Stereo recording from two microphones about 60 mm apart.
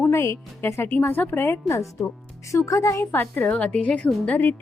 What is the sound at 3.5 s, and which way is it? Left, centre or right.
A woman's voice, left.